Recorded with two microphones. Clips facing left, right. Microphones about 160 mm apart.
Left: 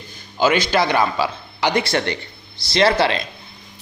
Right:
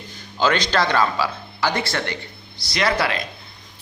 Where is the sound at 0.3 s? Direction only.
10° left (ahead or behind).